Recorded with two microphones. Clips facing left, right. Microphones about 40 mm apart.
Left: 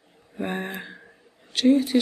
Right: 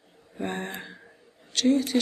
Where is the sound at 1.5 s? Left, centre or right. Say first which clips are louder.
Left 4 dB; centre.